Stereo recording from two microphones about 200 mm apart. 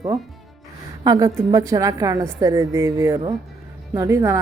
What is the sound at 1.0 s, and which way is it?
A woman's voice, 20° right (ahead or behind).